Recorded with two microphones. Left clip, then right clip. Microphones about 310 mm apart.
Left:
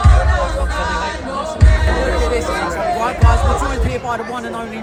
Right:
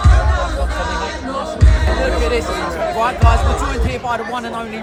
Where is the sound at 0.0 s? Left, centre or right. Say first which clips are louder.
Left 1 dB; left.